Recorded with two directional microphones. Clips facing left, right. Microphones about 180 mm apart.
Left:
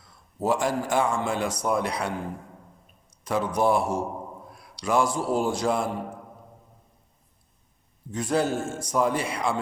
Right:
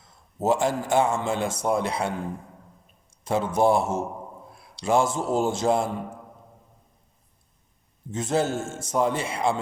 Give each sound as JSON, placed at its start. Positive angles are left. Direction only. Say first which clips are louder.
{"t": 0.0, "sound": "a man's voice", "louder": "right 2 dB", "side_deg": -25}
{"t": 8.1, "sound": "a man's voice", "louder": "even", "side_deg": -25}